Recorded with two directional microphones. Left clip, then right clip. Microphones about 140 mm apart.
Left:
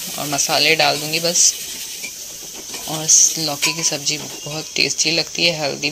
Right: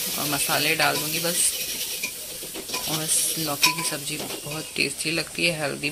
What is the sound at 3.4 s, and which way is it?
Speech, 25° left (ahead or behind).